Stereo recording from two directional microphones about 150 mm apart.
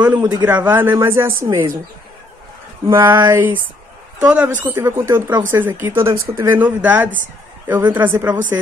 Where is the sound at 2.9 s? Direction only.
20° right (ahead or behind).